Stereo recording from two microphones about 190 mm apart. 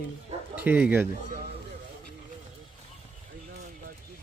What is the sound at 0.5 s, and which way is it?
Speech, 10° right (ahead or behind).